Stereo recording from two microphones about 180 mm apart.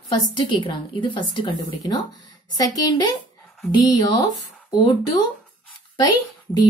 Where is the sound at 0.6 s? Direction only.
25° left (ahead or behind).